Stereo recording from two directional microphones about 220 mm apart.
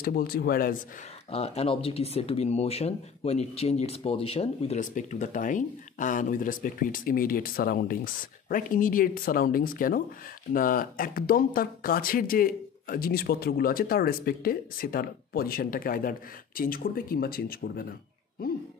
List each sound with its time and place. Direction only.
0.0 s speech: 40° left (ahead or behind)
1.3 s speech: 25° left (ahead or behind); by 17.9 s 45° left (ahead or behind)